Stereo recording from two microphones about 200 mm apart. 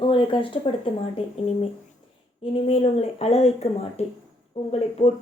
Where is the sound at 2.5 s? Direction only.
30° left (ahead or behind).